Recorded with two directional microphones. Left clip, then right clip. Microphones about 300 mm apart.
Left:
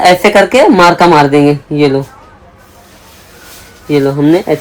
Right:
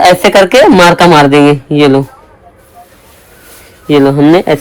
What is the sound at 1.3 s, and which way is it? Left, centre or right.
Speech, right.